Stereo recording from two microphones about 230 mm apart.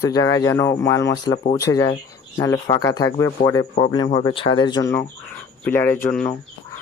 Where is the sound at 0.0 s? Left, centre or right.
Centre.